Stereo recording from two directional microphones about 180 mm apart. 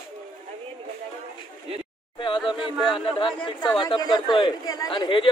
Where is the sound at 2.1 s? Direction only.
30° left (ahead or behind).